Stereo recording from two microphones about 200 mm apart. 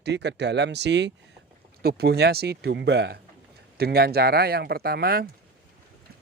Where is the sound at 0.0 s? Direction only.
60° right (ahead or behind).